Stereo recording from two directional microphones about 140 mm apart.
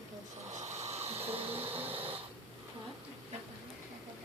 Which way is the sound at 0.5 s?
55° right (ahead or behind).